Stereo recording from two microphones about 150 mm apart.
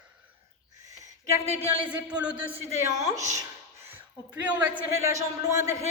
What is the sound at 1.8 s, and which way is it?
A woman's voice, 10° right (ahead or behind).